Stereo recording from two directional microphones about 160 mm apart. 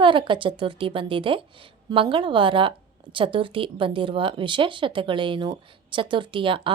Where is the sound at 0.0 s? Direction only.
30° right (ahead or behind).